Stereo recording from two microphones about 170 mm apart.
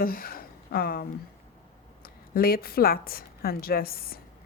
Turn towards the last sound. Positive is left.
turn(degrees=60)  # may be behind; listen again after turning